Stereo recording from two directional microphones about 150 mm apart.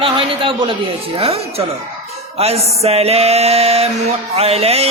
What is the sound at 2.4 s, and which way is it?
Music, 45° right (ahead or behind).